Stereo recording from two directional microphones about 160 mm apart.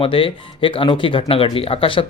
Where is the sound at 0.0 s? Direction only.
35° left (ahead or behind).